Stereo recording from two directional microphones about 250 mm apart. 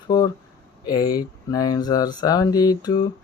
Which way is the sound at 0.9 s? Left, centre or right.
Centre.